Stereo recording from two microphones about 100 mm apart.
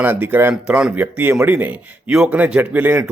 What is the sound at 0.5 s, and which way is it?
A man's voice, 5° right (ahead or behind).